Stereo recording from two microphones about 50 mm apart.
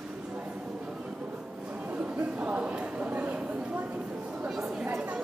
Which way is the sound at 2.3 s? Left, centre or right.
Right.